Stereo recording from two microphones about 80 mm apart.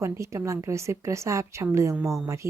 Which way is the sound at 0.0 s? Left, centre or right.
Right.